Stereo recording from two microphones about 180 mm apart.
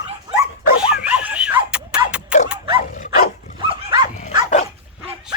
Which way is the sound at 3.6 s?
25° right (ahead or behind).